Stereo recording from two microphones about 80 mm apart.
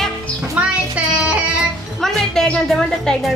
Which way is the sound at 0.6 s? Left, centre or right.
Centre.